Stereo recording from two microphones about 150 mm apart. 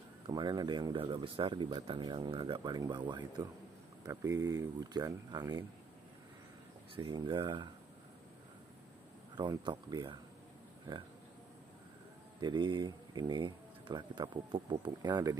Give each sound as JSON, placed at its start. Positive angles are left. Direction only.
{"t": 0.3, "sound": "speech", "side_deg": -30}
{"t": 4.0, "sound": "speech", "side_deg": -20}
{"t": 7.0, "sound": "speech", "side_deg": -30}
{"t": 9.4, "sound": "speech", "side_deg": -30}
{"t": 12.4, "sound": "speech", "side_deg": -30}